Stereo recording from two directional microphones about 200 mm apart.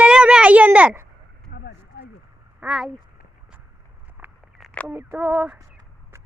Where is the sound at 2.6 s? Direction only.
Centre (ahead or behind).